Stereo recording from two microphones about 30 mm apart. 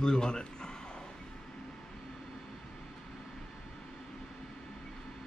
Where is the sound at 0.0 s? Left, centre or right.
Left.